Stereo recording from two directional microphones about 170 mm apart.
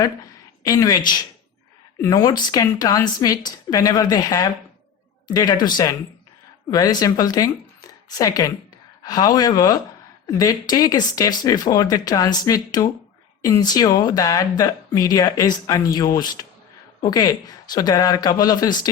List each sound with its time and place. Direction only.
0.6 s a woman's voice: 20° left (ahead or behind)